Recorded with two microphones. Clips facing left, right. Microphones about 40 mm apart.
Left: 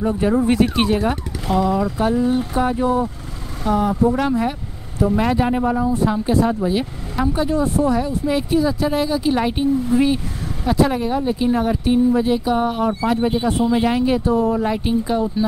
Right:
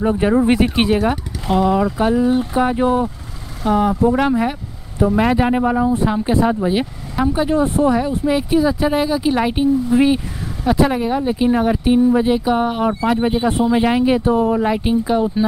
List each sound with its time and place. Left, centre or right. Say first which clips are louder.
0.0 s speech: right 3 dB; right
2.8 s speech: right 2 dB; right
3.6 s speech: right 2 dB; centre
8.3 s speech: right 3 dB; centre